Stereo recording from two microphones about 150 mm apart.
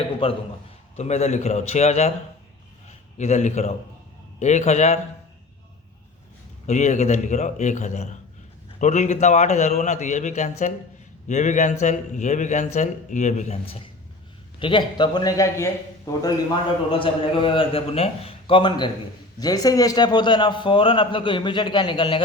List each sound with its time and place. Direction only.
0.2 s a man's voice: 35° left (ahead or behind)
3.2 s a man's voice: 50° left (ahead or behind)
6.7 s a man's voice: 50° left (ahead or behind)
14.6 s a man's voice: 30° left (ahead or behind)
16.9 s a man's voice: 35° left (ahead or behind)